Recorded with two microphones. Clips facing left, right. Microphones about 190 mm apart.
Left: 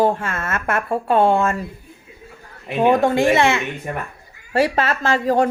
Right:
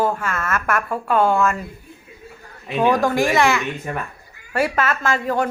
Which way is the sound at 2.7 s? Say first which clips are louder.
Left 2 dB; 25° left (ahead or behind).